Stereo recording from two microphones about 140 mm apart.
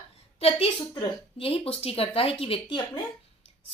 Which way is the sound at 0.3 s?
45° left (ahead or behind).